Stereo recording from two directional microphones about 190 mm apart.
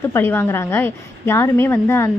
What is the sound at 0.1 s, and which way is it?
A woman's voice, 10° left (ahead or behind).